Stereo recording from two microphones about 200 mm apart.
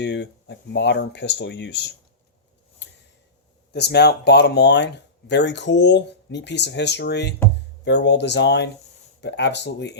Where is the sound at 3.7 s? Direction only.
55° left (ahead or behind).